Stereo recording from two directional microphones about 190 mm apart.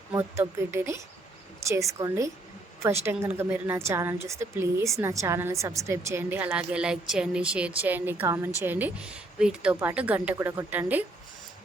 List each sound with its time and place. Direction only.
0.1 s a woman's voice: 15° right (ahead or behind)